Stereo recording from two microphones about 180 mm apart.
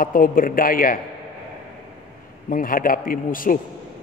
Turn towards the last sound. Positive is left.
turn(degrees=50)  # may be behind; listen again after turning